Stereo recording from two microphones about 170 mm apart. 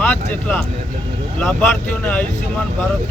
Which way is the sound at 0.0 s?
10° left (ahead or behind).